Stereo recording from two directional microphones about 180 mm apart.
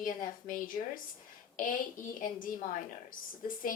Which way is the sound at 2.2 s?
50° left (ahead or behind).